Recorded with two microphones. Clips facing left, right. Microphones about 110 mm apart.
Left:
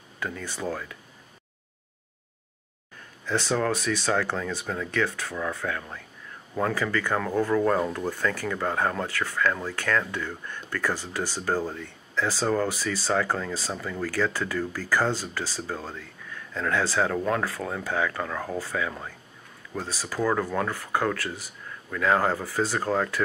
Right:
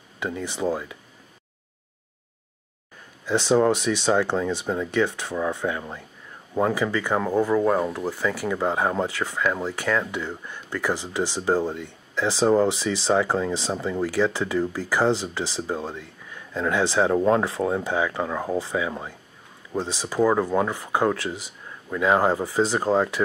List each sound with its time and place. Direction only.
0.2 s speech: 20° right (ahead or behind)
3.3 s speech: 20° right (ahead or behind)